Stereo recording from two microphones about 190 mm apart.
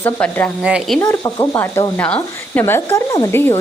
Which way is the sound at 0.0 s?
10° left (ahead or behind).